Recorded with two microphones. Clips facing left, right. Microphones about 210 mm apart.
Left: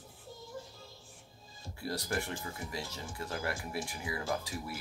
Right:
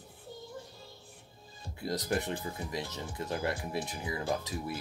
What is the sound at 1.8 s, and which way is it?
Speech, 20° right (ahead or behind).